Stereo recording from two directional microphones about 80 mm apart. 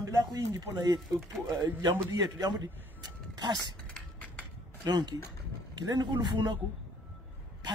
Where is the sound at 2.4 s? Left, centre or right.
Right.